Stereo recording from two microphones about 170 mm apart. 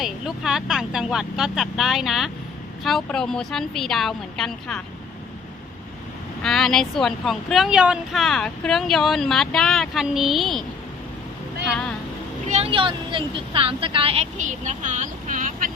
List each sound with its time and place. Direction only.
0.0 s speech: centre (ahead or behind)
6.4 s speech: centre (ahead or behind)
11.7 s speech: 5° left (ahead or behind)
12.5 s speech: 35° right (ahead or behind)